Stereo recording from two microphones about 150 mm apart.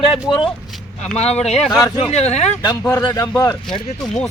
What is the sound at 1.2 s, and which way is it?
Speech, 45° left (ahead or behind).